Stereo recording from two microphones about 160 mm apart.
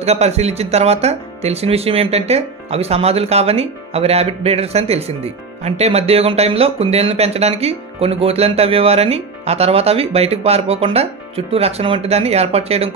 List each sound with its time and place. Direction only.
0.0 s speech: 40° right (ahead or behind)